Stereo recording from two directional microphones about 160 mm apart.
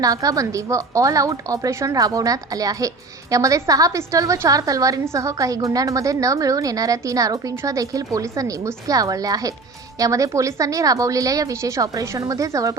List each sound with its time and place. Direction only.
0.0 s a woman's voice: 20° right (ahead or behind)